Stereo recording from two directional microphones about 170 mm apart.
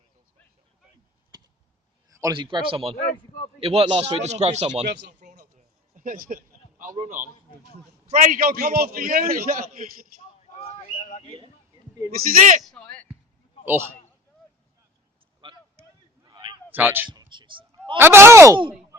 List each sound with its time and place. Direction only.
2.1 s speech: 25° right (ahead or behind)
2.9 s a man's voice: 50° left (ahead or behind)
3.6 s a man's voice: 35° right (ahead or behind)
5.5 s a sound: 50° right (ahead or behind)
8.1 s a man's voice: 50° right (ahead or behind)
10.5 s a sound: 35° left (ahead or behind)
12.1 s a man's voice: 50° right (ahead or behind)
12.6 s a man's voice: 5° left (ahead or behind)
15.4 s a sound: 30° right (ahead or behind)
16.7 s speech: 10° right (ahead or behind)
17.1 s a sound: 25° right (ahead or behind)
17.9 s speech: 15° right (ahead or behind)